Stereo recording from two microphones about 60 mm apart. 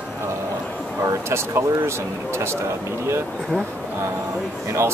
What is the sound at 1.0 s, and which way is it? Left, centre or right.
Speech, right.